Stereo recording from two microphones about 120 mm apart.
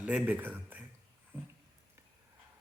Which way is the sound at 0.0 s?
10° right (ahead or behind).